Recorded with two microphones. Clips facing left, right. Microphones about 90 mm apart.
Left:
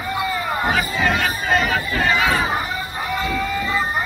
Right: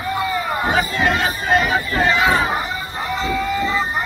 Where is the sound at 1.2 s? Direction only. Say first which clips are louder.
Right 2 dB; 30° right (ahead or behind).